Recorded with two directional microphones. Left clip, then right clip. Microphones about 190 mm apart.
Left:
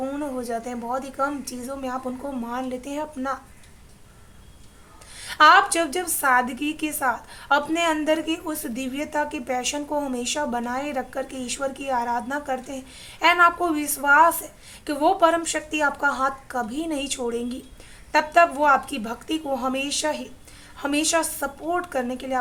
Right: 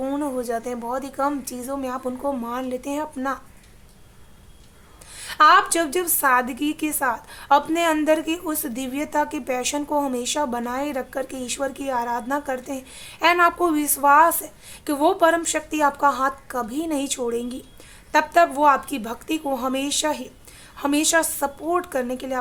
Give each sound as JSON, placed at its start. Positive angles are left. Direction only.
{"t": 0.0, "sound": "a woman's voice", "side_deg": -30}
{"t": 5.1, "sound": "a woman's voice", "side_deg": -25}